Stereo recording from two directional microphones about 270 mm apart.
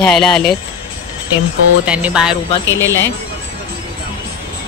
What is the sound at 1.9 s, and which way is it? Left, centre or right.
Speech, centre.